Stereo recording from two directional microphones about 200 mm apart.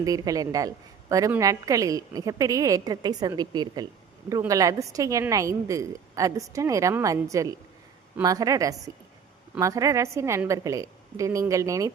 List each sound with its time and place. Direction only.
0.0 s a woman's voice: 15° right (ahead or behind)